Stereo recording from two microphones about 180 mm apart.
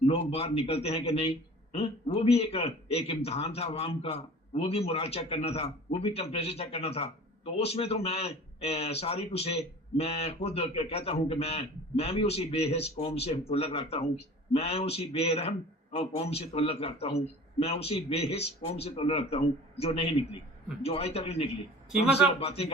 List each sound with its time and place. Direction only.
0.0 s a man's voice: 35° left (ahead or behind)